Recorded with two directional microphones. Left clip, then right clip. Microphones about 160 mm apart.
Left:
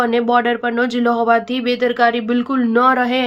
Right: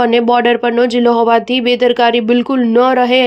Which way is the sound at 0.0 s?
40° right (ahead or behind).